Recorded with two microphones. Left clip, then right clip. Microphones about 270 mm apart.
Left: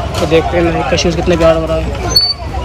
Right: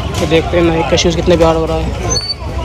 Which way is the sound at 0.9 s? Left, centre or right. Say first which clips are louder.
Right 1 dB; centre.